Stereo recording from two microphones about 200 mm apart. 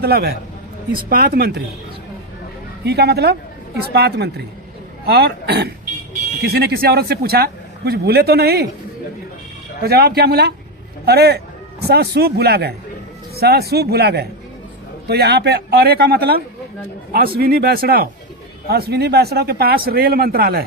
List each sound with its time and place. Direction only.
0.0 s speech: 50° right (ahead or behind)
2.8 s speech: 55° right (ahead or behind)
9.8 s speech: 50° right (ahead or behind)